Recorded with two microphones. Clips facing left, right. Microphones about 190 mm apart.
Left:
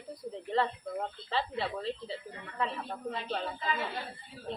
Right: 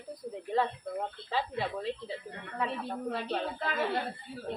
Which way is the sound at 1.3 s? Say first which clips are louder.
Even; 10° right (ahead or behind).